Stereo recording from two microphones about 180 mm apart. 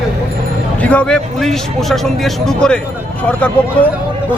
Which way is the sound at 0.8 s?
5° left (ahead or behind).